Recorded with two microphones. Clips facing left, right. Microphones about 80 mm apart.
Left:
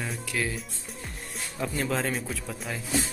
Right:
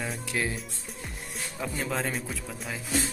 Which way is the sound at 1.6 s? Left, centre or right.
Centre.